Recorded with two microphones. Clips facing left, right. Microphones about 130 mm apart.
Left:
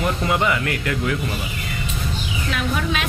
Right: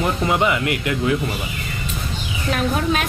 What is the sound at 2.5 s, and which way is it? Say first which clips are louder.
Speech: right 4 dB; 45° right (ahead or behind).